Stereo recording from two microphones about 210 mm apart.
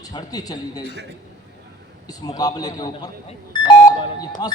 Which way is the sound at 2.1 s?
20° left (ahead or behind).